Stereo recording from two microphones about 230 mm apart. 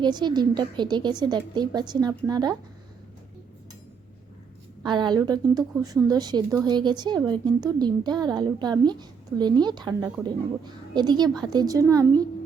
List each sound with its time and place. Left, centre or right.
0.0 s speech: centre
4.8 s a woman's voice: centre